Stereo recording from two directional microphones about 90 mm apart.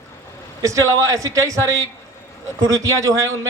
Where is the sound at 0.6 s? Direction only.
35° right (ahead or behind).